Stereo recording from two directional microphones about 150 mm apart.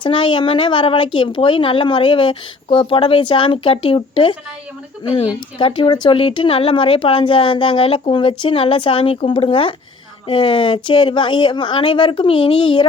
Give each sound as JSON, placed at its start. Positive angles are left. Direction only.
{"t": 0.0, "sound": "speech", "side_deg": 35}